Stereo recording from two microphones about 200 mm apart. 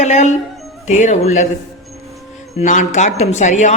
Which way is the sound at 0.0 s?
35° left (ahead or behind).